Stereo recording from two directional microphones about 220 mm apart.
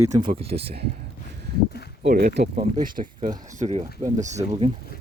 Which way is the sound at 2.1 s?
45° right (ahead or behind).